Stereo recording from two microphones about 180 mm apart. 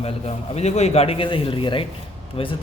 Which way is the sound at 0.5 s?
35° left (ahead or behind).